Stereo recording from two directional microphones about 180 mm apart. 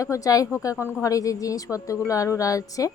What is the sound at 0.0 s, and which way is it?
A woman's voice, 20° left (ahead or behind).